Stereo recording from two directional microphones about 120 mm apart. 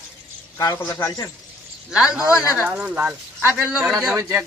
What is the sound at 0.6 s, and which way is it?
Speech, 30° left (ahead or behind).